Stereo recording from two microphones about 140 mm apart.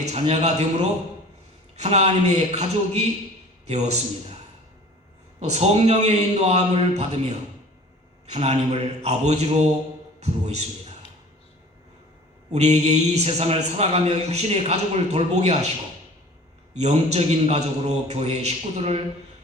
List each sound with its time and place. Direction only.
0.1 s a man's voice: 50° right (ahead or behind)
5.4 s a man's voice: 50° right (ahead or behind)
8.3 s a man's voice: 50° right (ahead or behind)
12.5 s a man's voice: 50° right (ahead or behind)
16.7 s a man's voice: 50° right (ahead or behind)